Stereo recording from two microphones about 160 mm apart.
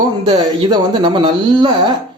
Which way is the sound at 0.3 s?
30° right (ahead or behind).